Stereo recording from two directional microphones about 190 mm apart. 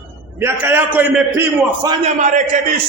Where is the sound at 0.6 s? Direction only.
10° right (ahead or behind).